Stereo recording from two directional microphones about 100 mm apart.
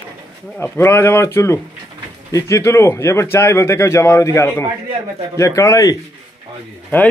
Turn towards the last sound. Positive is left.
turn(degrees=20)  # may be behind; listen again after turning